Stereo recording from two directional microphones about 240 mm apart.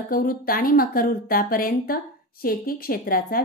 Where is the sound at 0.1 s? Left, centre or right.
Left.